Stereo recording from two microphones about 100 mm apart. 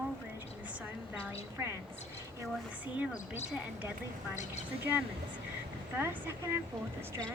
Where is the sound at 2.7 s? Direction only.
15° right (ahead or behind).